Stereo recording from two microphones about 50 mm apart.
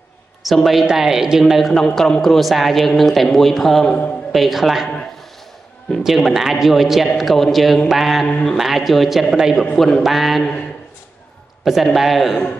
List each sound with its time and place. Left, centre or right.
0.4 s a woman's voice: centre
1.5 s a man's voice: centre
3.8 s a man's voice: left
4.3 s a man's voice: centre
6.0 s a man's voice: centre
9.8 s speech: centre
10.0 s a man's voice: centre
11.6 s a man's voice: centre